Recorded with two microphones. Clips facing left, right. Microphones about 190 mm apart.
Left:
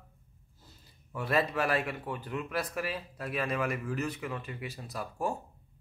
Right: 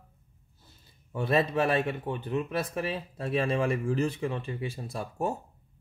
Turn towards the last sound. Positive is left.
turn(degrees=-25)  # may be behind; listen again after turning